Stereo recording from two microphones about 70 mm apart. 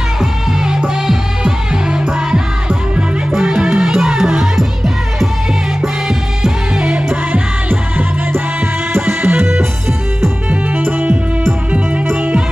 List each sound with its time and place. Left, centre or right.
0.2 s music: centre
8.3 s music: right
10.5 s music: right
12.2 s music: right